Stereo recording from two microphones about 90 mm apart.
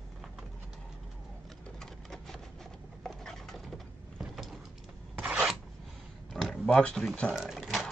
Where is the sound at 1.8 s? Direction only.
5° left (ahead or behind).